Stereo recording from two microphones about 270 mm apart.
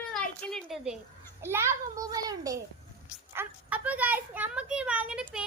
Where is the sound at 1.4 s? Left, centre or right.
Centre.